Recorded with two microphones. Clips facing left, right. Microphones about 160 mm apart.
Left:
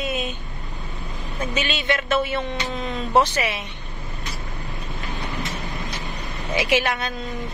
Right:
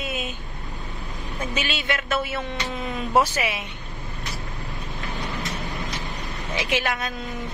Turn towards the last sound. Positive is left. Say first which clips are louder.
# left 4 dB
turn(degrees=0)  # may be behind; listen again after turning